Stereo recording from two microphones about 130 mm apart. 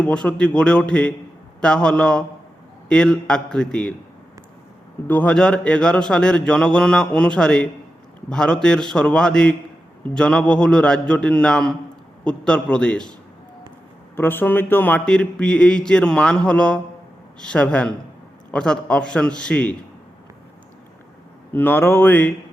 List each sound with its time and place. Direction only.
0.0 s speech: 10° left (ahead or behind)
5.0 s speech: 10° left (ahead or behind)
14.2 s speech: 15° left (ahead or behind)
21.5 s speech: 15° left (ahead or behind)